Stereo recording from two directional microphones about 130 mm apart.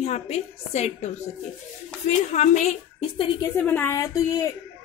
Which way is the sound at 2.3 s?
65° left (ahead or behind).